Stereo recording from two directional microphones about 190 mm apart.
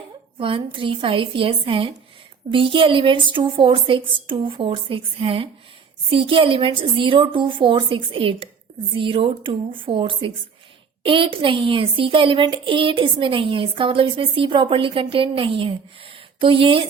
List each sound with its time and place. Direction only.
0.3 s speech: 25° right (ahead or behind)